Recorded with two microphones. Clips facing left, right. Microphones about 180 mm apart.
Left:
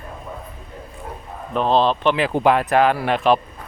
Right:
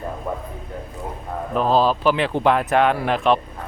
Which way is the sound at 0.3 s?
60° right (ahead or behind).